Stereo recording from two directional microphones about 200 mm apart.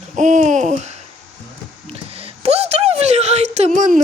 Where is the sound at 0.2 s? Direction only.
40° right (ahead or behind).